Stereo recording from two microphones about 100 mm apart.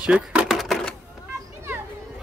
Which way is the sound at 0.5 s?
Centre (ahead or behind).